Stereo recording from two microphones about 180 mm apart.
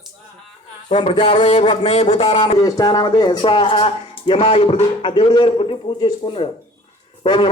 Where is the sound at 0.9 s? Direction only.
30° left (ahead or behind).